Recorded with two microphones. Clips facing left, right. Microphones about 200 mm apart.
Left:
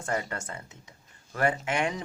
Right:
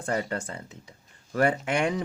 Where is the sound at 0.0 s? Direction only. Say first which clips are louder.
Right 3 dB; 35° right (ahead or behind).